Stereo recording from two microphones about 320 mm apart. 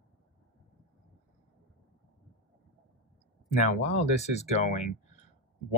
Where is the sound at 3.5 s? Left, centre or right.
Left.